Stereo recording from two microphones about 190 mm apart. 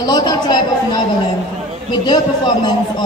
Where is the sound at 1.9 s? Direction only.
25° left (ahead or behind).